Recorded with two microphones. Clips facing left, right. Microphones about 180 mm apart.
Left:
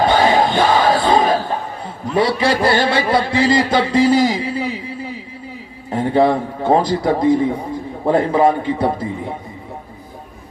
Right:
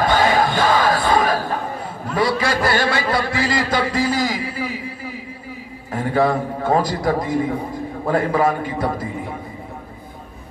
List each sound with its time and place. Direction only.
0.0 s crowd: 25° left (ahead or behind)
2.0 s a man's voice: 25° left (ahead or behind)